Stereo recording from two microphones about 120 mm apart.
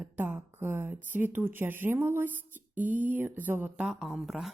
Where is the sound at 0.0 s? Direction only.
15° right (ahead or behind).